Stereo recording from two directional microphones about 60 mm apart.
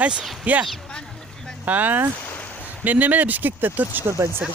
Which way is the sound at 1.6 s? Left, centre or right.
Right.